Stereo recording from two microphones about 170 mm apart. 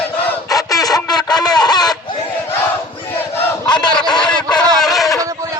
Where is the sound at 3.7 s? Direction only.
25° left (ahead or behind).